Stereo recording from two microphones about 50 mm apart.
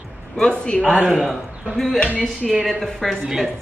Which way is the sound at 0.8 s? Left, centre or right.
Right.